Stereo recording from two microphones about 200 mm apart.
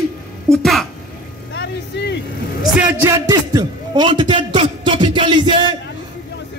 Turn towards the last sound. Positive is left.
turn(degrees=-25)  # may be behind; listen again after turning